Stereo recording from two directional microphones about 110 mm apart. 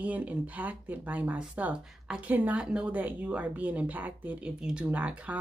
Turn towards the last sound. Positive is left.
turn(degrees=-15)  # may be behind; listen again after turning